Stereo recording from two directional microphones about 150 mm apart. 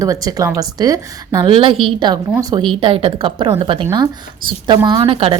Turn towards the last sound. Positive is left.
turn(degrees=-40)  # may be behind; listen again after turning